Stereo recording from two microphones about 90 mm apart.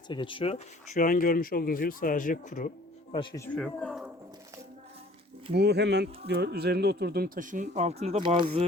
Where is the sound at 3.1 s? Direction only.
65° left (ahead or behind).